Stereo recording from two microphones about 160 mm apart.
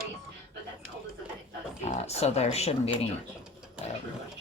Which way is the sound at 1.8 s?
45° left (ahead or behind).